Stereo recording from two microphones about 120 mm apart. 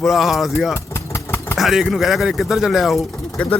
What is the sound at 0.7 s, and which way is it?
Vehicle, 25° left (ahead or behind).